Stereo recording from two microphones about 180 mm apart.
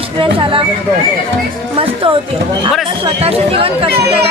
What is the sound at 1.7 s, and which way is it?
Speech, 30° right (ahead or behind).